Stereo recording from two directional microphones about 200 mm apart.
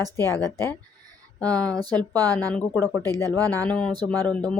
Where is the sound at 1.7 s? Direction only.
20° right (ahead or behind).